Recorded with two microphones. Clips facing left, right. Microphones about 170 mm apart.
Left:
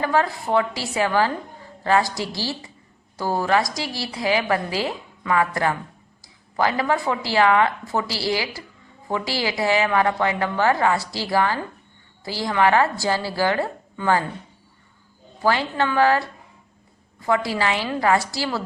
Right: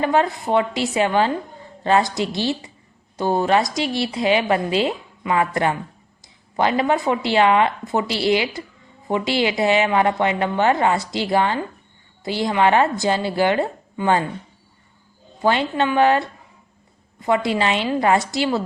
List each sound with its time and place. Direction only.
0.0 s a woman's voice: 20° right (ahead or behind)
15.4 s a woman's voice: 20° right (ahead or behind)